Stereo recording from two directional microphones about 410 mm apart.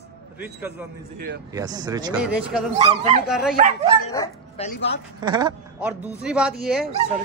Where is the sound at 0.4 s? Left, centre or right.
Centre.